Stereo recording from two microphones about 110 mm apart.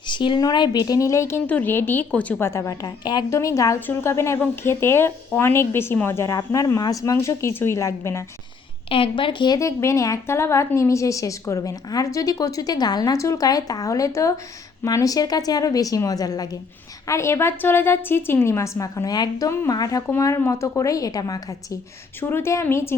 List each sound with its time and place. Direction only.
0.1 s speech: 45° left (ahead or behind); by 1.4 s 25° left (ahead or behind)
1.5 s a woman's voice: 15° left (ahead or behind)
2.5 s a woman's voice: 25° left (ahead or behind)
2.8 s speech: 40° left (ahead or behind)
3.2 s a woman's voice: 25° left (ahead or behind)
8.9 s a woman's voice: 55° left (ahead or behind)
9.6 s a woman's voice: 30° left (ahead or behind)
22.2 s a woman's voice: 20° left (ahead or behind)